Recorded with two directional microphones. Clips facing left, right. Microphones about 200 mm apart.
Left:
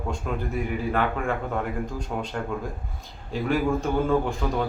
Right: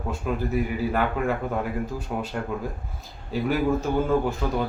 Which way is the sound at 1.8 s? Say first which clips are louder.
Right 1 dB; 5° right (ahead or behind).